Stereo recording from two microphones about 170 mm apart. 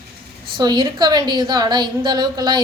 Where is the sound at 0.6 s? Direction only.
25° right (ahead or behind).